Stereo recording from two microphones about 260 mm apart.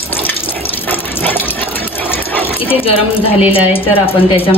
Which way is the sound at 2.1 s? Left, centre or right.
Centre.